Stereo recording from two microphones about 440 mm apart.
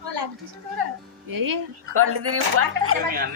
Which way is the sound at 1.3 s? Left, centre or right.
Right.